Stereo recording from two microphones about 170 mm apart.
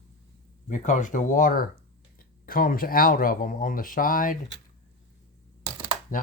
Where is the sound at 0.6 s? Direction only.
45° left (ahead or behind).